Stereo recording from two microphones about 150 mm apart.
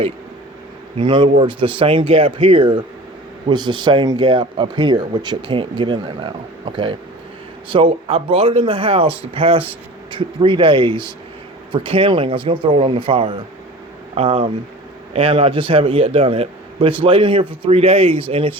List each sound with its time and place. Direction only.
0.9 s speech: 35° right (ahead or behind)